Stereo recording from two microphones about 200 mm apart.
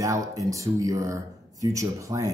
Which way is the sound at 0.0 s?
15° right (ahead or behind).